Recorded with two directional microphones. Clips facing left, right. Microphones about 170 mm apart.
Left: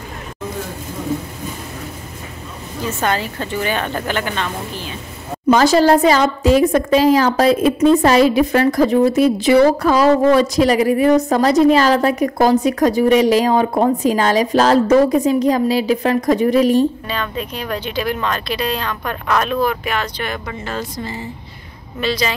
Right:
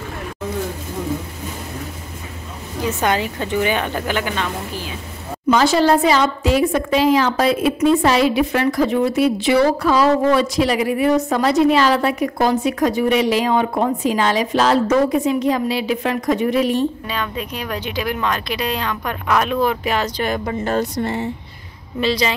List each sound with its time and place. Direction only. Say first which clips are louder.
2.8 s speech: right 1 dB; 15° right (ahead or behind)
5.5 s a woman's voice: left 3 dB; 40° left (ahead or behind)
17.1 s speech: left 1 dB; 10° right (ahead or behind)
19.6 s speech: right 1 dB; 30° right (ahead or behind)
20.8 s speech: right 5 dB; 65° right (ahead or behind)
22.0 s speech: right 1 dB; 30° right (ahead or behind)